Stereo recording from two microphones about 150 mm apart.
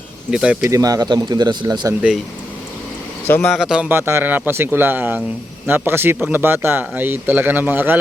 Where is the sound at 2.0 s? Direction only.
5° right (ahead or behind).